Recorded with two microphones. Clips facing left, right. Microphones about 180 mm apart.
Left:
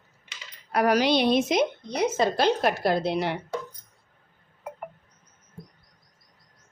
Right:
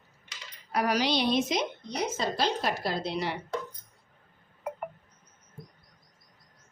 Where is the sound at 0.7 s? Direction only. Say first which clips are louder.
Left 6 dB; 55° left (ahead or behind).